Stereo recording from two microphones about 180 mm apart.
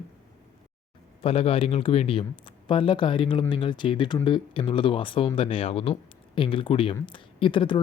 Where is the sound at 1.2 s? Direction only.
30° left (ahead or behind).